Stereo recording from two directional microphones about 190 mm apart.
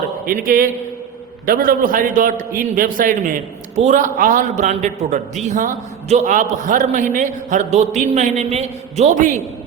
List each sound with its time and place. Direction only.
0.4 s a man's voice: 45° right (ahead or behind)